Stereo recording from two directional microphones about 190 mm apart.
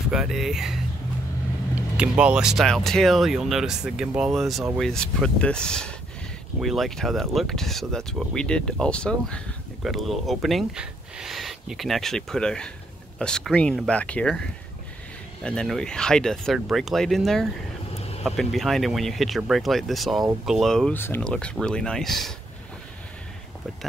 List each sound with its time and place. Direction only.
0.1 s speech: centre (ahead or behind)
1.8 s speech: 5° right (ahead or behind)
15.4 s speech: 5° left (ahead or behind)
17.9 s vehicle: 30° left (ahead or behind)
18.2 s speech: centre (ahead or behind)